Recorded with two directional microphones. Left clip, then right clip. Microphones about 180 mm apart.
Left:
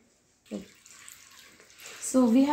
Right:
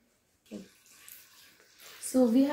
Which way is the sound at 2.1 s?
35° left (ahead or behind).